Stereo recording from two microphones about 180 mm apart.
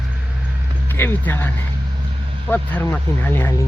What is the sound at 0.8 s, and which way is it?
Speech, 10° left (ahead or behind).